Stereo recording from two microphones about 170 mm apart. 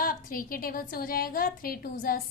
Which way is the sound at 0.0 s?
55° left (ahead or behind).